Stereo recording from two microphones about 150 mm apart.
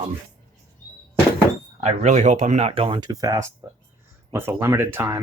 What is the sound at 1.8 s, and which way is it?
Speech, 50° right (ahead or behind).